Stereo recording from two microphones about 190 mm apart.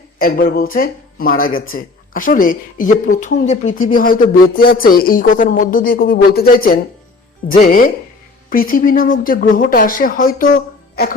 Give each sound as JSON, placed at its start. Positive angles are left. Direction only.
{"t": 0.2, "sound": "speech", "side_deg": 50}